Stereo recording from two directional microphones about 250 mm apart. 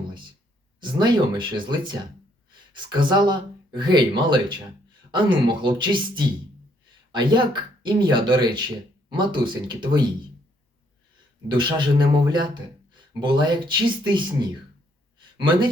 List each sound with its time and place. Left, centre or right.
0.8 s speech: centre
11.4 s speech: centre